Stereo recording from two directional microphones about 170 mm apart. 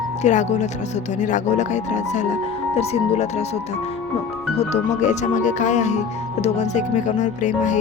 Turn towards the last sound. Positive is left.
turn(degrees=45)  # may be behind; listen again after turning